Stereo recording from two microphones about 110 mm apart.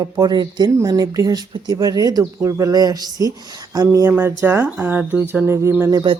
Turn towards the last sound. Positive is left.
turn(degrees=-45)  # may be behind; listen again after turning